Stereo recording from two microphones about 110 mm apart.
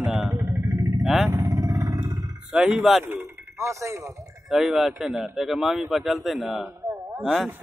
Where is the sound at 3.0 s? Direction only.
20° right (ahead or behind).